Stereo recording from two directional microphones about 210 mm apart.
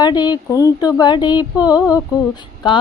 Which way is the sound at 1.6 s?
5° right (ahead or behind).